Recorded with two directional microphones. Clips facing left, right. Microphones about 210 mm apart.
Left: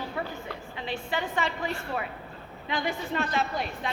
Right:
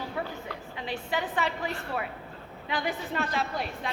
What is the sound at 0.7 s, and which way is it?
Speech, 10° right (ahead or behind).